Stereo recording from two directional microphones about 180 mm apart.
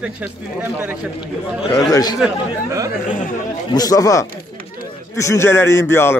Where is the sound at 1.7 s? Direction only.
20° left (ahead or behind).